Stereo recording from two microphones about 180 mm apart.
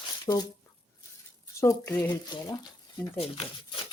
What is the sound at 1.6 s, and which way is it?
Speech, 15° left (ahead or behind).